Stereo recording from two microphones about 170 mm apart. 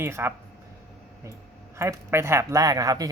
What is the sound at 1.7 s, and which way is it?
A man's voice, 15° right (ahead or behind).